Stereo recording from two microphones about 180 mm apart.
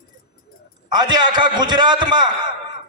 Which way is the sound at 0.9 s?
25° right (ahead or behind).